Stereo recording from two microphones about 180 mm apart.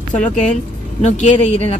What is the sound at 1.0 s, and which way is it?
Speech, 40° left (ahead or behind).